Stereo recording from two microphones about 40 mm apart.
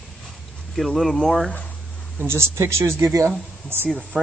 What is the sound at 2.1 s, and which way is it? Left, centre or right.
Speech, right.